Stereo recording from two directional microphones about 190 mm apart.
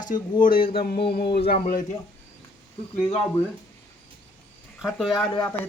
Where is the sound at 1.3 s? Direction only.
50° left (ahead or behind).